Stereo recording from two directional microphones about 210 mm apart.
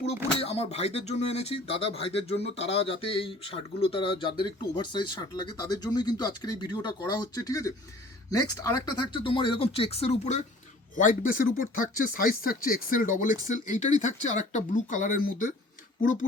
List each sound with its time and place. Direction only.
0.3 s speech: 30° left (ahead or behind)
8.9 s speech: 20° left (ahead or behind); by 15.4 s 40° left (ahead or behind)